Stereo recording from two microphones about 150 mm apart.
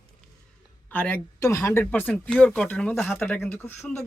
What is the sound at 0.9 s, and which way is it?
Speech, 10° left (ahead or behind).